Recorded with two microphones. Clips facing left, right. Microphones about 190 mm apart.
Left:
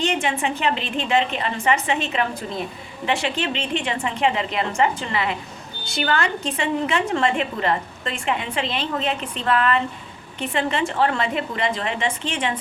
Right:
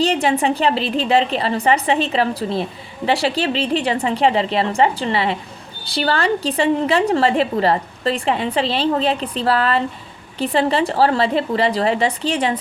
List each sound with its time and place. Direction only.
0.0 s a woman's voice: 35° right (ahead or behind)